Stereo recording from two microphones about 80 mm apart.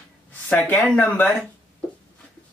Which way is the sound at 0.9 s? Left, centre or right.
Left.